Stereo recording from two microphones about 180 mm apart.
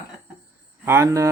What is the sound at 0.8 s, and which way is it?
Speech, 15° right (ahead or behind).